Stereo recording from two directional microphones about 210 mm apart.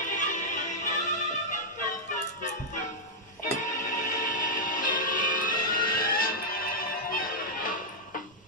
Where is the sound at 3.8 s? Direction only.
40° left (ahead or behind).